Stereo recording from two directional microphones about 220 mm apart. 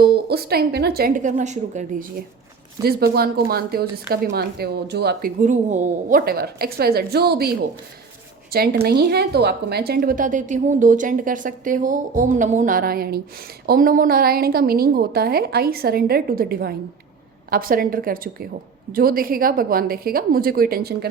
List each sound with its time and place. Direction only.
0.0 s a woman's voice: 45° right (ahead or behind)
5.4 s a woman's voice: 35° right (ahead or behind)
8.5 s a woman's voice: 45° right (ahead or behind)